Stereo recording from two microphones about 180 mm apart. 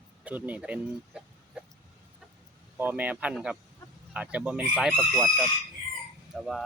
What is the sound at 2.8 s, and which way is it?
Speech, 10° right (ahead or behind).